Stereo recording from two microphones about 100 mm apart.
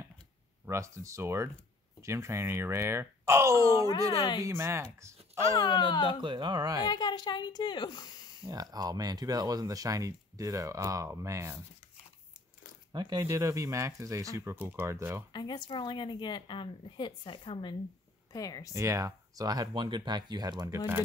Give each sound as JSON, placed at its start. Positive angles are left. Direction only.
{"t": 0.7, "sound": "speech", "side_deg": -30}
{"t": 5.4, "sound": "a woman's voice", "side_deg": 45}
{"t": 6.2, "sound": "speech", "side_deg": -50}
{"t": 6.9, "sound": "a woman's voice", "side_deg": 45}
{"t": 8.5, "sound": "speech", "side_deg": -40}
{"t": 12.9, "sound": "speech", "side_deg": -45}
{"t": 13.3, "sound": "speech", "side_deg": -30}
{"t": 14.6, "sound": "speech", "side_deg": -20}
{"t": 15.3, "sound": "a woman's voice", "side_deg": 45}
{"t": 18.3, "sound": "speech", "side_deg": 35}
{"t": 18.7, "sound": "speech", "side_deg": -30}
{"t": 20.7, "sound": "speech", "side_deg": -25}